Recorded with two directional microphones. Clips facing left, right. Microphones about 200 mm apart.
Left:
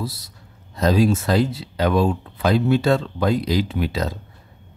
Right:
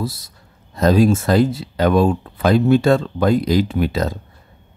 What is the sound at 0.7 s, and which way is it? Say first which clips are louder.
Speech: right 4 dB; 50° right (ahead or behind).